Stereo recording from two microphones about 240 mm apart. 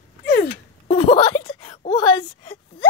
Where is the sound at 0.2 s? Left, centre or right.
Left.